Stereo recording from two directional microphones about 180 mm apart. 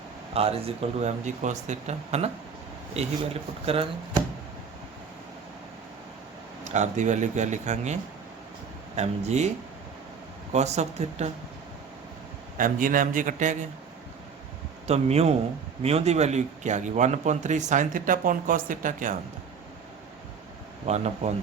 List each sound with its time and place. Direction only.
0.3 s speech: 35° right (ahead or behind)
3.7 s speech: 30° right (ahead or behind)
6.7 s speech: 40° right (ahead or behind)
9.0 s speech: 40° right (ahead or behind)
10.5 s speech: 40° right (ahead or behind)
12.5 s speech: 50° right (ahead or behind)
14.8 s speech: 35° right (ahead or behind)
20.8 s speech: 40° right (ahead or behind)